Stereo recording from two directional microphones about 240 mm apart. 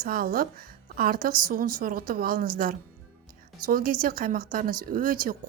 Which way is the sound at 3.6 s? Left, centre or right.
Right.